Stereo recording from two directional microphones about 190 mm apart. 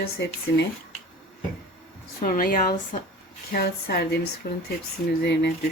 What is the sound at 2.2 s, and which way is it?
Speech, 50° left (ahead or behind).